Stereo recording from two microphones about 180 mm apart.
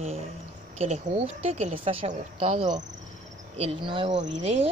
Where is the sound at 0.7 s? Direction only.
40° right (ahead or behind).